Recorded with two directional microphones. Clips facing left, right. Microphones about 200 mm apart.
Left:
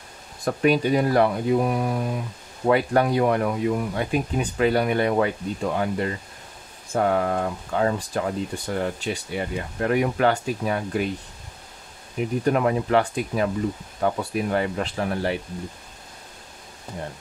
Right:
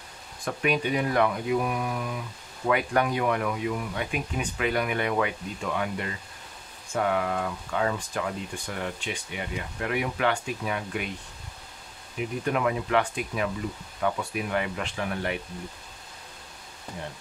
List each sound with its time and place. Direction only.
0.5 s speech: 35° left (ahead or behind)
12.4 s speech: 40° left (ahead or behind)